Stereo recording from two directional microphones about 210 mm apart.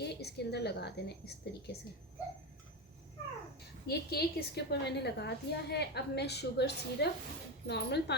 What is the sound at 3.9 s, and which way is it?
A woman's voice, 50° left (ahead or behind).